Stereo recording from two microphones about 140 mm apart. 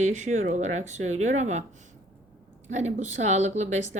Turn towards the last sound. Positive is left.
turn(degrees=-55)  # may be behind; listen again after turning